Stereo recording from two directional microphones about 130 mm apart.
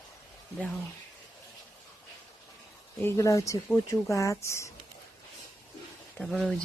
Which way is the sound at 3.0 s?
25° left (ahead or behind).